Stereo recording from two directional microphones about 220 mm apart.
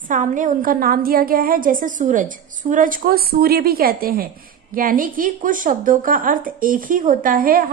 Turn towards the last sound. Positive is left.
turn(degrees=-40)  # may be behind; listen again after turning